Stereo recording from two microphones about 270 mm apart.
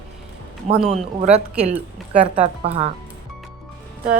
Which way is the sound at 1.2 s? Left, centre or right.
Right.